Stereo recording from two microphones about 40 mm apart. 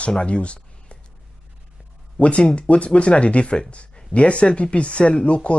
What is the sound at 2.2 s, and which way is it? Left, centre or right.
Speech, left.